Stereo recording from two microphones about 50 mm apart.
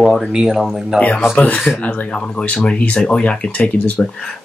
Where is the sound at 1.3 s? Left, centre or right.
Left.